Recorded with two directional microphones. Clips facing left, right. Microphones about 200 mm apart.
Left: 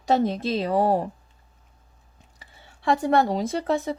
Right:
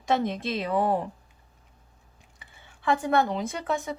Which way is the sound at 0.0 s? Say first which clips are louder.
Left 4 dB; 35° left (ahead or behind).